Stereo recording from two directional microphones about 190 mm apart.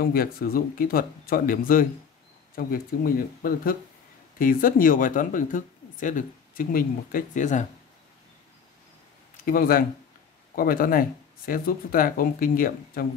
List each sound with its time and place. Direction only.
0.0 s speech: 50° left (ahead or behind)
9.4 s speech: 50° left (ahead or behind)